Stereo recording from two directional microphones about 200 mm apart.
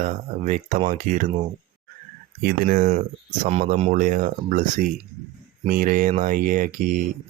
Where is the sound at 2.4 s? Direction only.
45° right (ahead or behind).